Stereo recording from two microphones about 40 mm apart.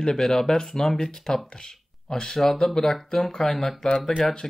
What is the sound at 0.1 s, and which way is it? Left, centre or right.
Speech, centre.